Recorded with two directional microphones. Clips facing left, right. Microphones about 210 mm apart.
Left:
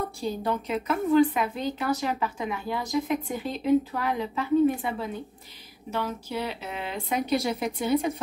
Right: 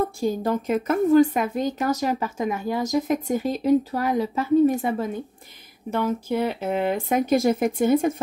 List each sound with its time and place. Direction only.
0.2 s speech: 45° right (ahead or behind)